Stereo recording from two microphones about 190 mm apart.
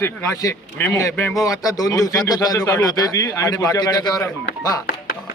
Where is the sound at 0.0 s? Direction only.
10° left (ahead or behind).